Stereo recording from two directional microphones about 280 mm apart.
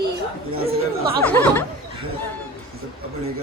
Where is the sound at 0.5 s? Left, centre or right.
Right.